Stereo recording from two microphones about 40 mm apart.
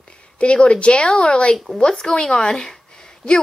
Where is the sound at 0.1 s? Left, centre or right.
Left.